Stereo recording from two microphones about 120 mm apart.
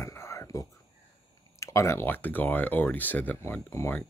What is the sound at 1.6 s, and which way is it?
Speech, 25° left (ahead or behind).